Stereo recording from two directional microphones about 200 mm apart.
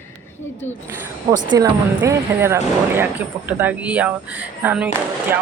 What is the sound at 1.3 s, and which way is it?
Speech, 15° right (ahead or behind).